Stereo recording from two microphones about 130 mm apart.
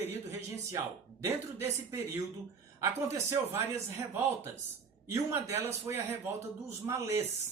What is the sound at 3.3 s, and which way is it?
Speech, 20° right (ahead or behind).